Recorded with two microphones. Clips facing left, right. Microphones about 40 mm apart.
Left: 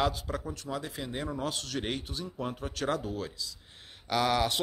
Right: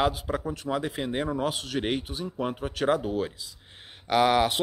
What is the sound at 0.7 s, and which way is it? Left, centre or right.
Speech, right.